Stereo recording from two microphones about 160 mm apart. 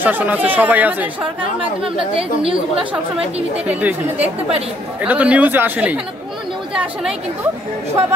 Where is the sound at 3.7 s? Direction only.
10° right (ahead or behind).